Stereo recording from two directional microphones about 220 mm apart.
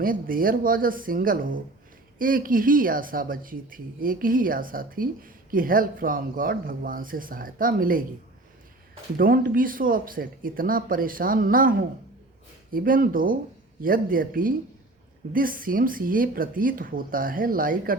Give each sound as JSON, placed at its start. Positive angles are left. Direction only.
{"t": 0.0, "sound": "speech", "side_deg": -40}
{"t": 9.1, "sound": "speech", "side_deg": -40}